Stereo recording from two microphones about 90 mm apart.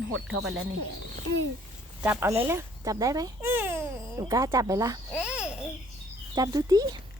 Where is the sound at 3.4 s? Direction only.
25° right (ahead or behind).